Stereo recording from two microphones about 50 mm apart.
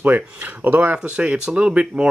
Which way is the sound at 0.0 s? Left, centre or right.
Right.